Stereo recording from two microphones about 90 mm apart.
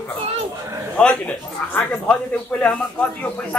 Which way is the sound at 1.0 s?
10° left (ahead or behind).